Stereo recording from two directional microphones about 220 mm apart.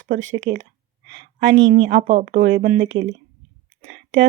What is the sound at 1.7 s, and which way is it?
Speech, 40° right (ahead or behind).